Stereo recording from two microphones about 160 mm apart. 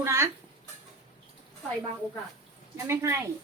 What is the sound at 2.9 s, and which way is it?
Speech, 15° right (ahead or behind).